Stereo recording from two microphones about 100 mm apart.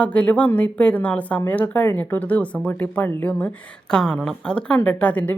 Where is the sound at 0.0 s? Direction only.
15° left (ahead or behind).